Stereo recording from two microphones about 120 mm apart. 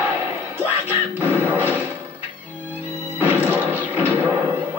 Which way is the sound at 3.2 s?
15° right (ahead or behind).